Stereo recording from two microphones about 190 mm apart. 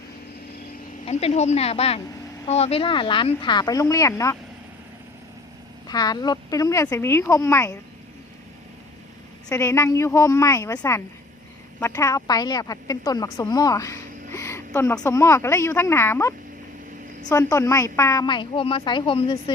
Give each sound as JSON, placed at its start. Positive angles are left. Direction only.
{"t": 1.0, "sound": "a woman's voice", "side_deg": 35}
{"t": 5.9, "sound": "a woman's voice", "side_deg": 20}
{"t": 9.5, "sound": "speech", "side_deg": 15}
{"t": 14.3, "sound": "a sound", "side_deg": 15}
{"t": 14.7, "sound": "a woman's voice", "side_deg": 10}